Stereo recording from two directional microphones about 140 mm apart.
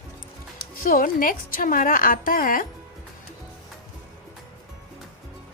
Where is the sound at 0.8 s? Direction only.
75° left (ahead or behind).